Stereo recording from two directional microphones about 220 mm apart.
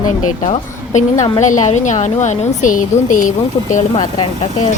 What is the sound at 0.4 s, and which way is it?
Speech, 30° left (ahead or behind).